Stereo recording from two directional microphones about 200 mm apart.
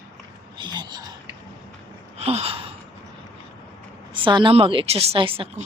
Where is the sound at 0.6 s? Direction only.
20° right (ahead or behind).